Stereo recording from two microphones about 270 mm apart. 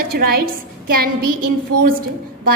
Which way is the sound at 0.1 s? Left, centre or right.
Right.